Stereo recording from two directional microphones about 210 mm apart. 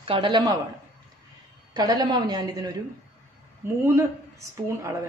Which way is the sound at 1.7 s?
20° right (ahead or behind).